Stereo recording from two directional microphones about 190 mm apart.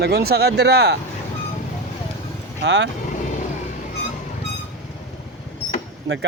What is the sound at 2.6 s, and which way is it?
Speech, 65° right (ahead or behind).